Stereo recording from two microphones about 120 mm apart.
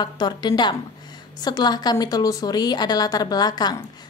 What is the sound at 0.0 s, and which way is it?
A woman's voice, 35° left (ahead or behind).